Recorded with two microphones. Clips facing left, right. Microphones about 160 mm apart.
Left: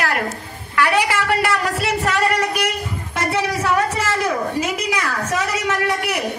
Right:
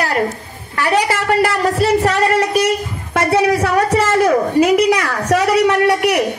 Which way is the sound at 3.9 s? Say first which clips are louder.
Right 8 dB; 60° right (ahead or behind).